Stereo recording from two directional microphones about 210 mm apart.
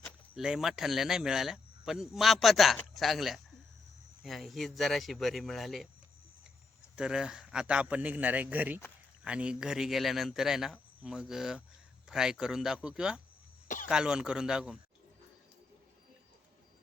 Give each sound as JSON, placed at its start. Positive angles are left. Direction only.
{"t": 0.0, "sound": "speech", "side_deg": 0}
{"t": 6.9, "sound": "speech", "side_deg": -5}